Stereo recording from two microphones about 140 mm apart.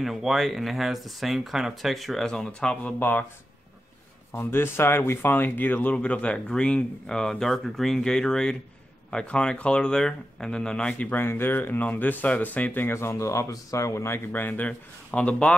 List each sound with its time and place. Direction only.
0.0 s speech: centre (ahead or behind)
4.3 s speech: 15° left (ahead or behind)